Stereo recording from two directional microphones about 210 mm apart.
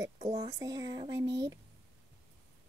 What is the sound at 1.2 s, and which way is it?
Speech, 55° right (ahead or behind).